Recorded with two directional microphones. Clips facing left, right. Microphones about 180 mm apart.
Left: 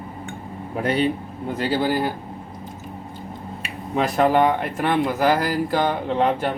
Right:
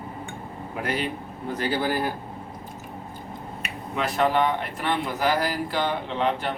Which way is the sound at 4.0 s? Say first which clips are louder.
Left 5 dB; 45° left (ahead or behind).